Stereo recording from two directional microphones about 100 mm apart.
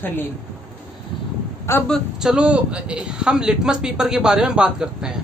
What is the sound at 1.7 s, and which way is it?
Speech, 25° left (ahead or behind).